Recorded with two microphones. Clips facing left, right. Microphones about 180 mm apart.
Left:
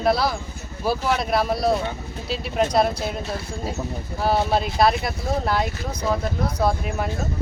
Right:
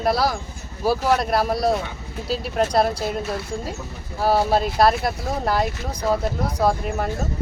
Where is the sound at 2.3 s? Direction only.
Centre (ahead or behind).